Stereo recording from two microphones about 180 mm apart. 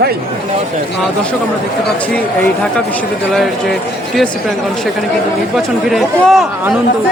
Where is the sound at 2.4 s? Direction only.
5° left (ahead or behind).